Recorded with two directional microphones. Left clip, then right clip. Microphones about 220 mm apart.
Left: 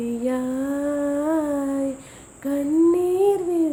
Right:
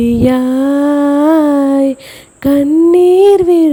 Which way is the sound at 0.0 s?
45° right (ahead or behind).